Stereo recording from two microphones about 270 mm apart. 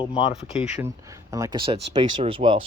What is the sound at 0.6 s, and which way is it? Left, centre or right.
Speech, centre.